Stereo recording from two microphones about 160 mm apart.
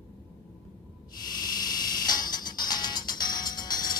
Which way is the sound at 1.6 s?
25° left (ahead or behind).